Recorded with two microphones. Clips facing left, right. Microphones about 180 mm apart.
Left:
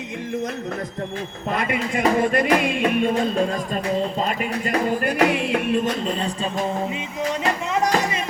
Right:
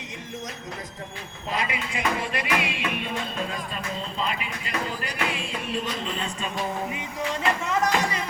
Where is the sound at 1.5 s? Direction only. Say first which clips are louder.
Left 6 dB; 50° left (ahead or behind); by 6.6 s 35° left (ahead or behind).